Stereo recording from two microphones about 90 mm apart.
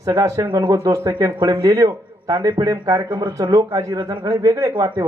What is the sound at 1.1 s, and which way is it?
Speech, 50° right (ahead or behind).